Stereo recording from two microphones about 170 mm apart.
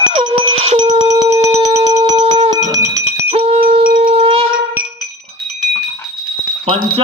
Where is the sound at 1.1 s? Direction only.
20° right (ahead or behind).